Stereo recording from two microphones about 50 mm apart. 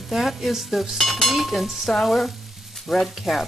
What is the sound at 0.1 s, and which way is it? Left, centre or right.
Sizzle, centre.